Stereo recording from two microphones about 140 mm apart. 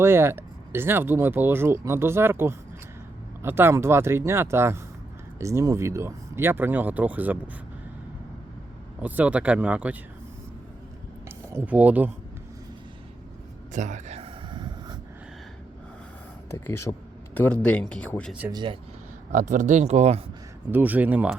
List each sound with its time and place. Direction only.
0.0 s speech: 20° right (ahead or behind)
9.0 s speech: 10° right (ahead or behind)
11.3 s speech: 15° right (ahead or behind)
13.7 s speech: 60° right (ahead or behind)
14.5 s snort: 30° right (ahead or behind)
16.5 s speech: 20° left (ahead or behind)
17.3 s speech: 10° left (ahead or behind)
18.5 s speech: 35° right (ahead or behind)
19.3 s speech: 65° right (ahead or behind)
20.7 s speech: 10° right (ahead or behind)